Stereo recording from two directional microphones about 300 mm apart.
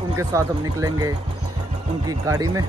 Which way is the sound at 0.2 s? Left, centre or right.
Centre.